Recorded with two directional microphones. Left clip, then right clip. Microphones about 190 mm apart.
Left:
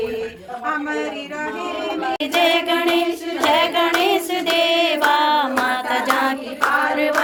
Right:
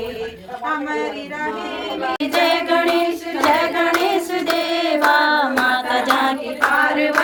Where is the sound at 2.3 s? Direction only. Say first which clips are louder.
Even; centre (ahead or behind).